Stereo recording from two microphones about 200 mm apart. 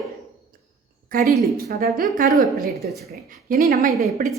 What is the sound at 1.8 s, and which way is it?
Speech, 45° right (ahead or behind).